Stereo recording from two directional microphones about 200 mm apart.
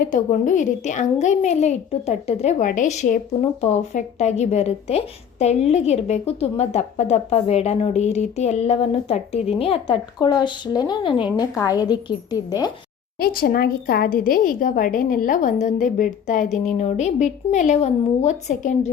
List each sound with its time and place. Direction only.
0.0 s a woman's voice: 40° left (ahead or behind); by 12.7 s 20° left (ahead or behind)
13.1 s a woman's voice: 45° left (ahead or behind)